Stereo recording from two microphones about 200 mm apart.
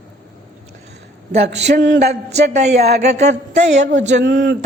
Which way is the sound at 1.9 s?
50° right (ahead or behind).